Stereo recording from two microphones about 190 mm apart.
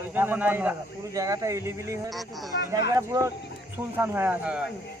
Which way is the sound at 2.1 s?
Centre (ahead or behind).